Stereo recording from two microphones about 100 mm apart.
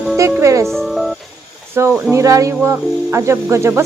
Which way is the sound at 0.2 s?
30° right (ahead or behind).